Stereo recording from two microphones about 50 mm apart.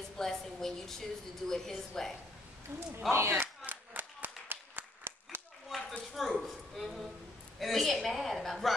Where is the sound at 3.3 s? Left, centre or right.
Right.